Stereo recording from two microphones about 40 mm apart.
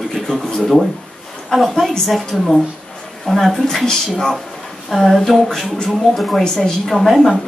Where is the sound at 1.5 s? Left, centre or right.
Centre.